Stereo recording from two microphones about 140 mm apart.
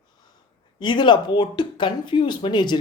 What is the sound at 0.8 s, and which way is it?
Speech, 35° left (ahead or behind).